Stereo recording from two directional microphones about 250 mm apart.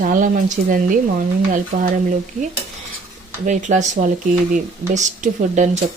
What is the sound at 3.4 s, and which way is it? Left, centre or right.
Speech, right.